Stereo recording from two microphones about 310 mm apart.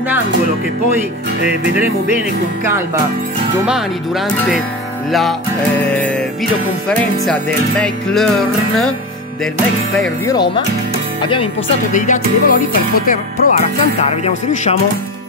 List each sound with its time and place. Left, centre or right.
3.6 s music: centre
5.9 s music: centre
7.8 s music: centre
9.9 s music: centre
10.3 s speech: centre
11.9 s music: left